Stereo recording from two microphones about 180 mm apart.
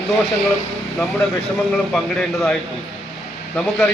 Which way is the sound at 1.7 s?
Centre (ahead or behind).